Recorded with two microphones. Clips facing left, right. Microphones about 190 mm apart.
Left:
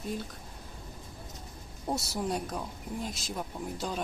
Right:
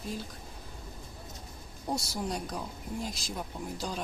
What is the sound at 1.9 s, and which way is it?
Speech, 5° left (ahead or behind).